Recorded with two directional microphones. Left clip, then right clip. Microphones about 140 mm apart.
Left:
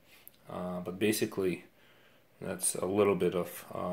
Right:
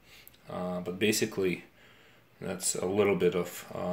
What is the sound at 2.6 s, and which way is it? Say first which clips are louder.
Speech: right 1 dB; 40° left (ahead or behind).